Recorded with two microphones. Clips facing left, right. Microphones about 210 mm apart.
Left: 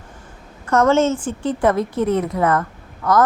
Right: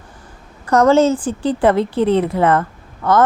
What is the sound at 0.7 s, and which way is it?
Speech, 35° right (ahead or behind).